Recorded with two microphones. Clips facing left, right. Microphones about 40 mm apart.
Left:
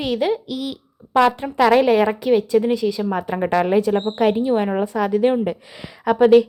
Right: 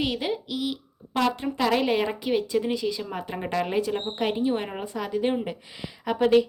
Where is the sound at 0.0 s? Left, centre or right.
Left.